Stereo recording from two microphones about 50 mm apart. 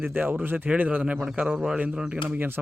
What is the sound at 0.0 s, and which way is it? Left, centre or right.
Speech, right.